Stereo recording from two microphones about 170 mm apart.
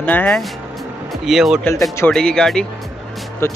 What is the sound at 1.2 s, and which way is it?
Speech, centre (ahead or behind).